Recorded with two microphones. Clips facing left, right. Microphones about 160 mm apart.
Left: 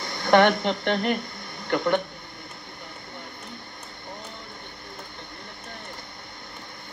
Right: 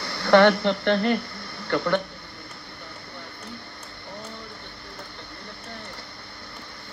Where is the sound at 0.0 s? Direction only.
20° left (ahead or behind).